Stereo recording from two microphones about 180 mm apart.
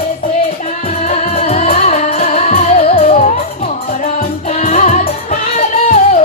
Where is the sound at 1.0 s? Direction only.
35° left (ahead or behind).